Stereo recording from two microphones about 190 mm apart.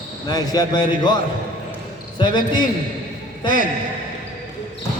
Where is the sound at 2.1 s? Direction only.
25° left (ahead or behind).